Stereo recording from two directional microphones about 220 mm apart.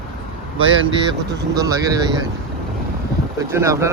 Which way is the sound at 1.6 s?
15° right (ahead or behind).